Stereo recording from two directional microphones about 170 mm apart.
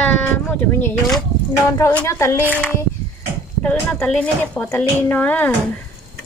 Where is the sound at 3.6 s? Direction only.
5° left (ahead or behind).